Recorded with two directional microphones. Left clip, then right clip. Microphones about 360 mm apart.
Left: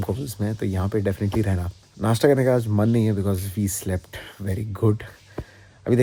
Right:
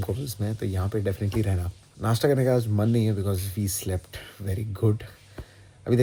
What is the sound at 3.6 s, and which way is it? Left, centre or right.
Speech, centre.